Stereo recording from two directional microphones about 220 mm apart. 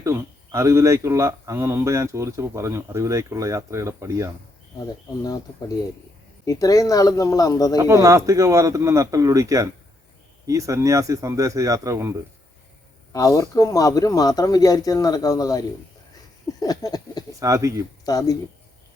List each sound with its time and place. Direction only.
0.0 s speech: 15° right (ahead or behind)
5.2 s speech: 15° left (ahead or behind)
7.8 s speech: 15° right (ahead or behind)
13.1 s speech: 15° left (ahead or behind)
16.6 s a sound: 15° left (ahead or behind)
17.4 s speech: 15° right (ahead or behind)
18.0 s speech: 15° left (ahead or behind)